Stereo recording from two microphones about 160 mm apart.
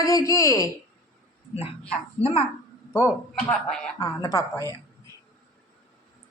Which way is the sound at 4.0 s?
20° left (ahead or behind).